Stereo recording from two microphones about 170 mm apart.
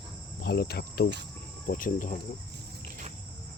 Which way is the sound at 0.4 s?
70° left (ahead or behind).